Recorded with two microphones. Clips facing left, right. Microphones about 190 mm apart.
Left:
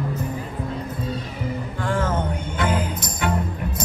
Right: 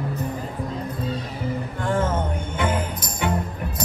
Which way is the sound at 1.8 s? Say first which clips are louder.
Right 1 dB; 25° right (ahead or behind).